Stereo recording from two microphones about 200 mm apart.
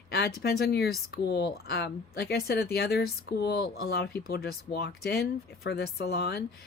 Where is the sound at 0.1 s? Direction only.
50° left (ahead or behind).